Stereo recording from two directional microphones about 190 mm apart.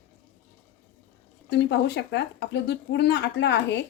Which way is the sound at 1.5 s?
65° left (ahead or behind).